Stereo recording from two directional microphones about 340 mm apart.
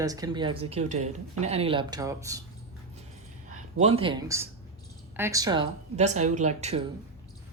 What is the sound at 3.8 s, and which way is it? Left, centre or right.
A woman's voice, centre.